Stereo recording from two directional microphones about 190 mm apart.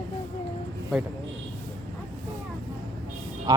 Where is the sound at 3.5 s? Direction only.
20° right (ahead or behind).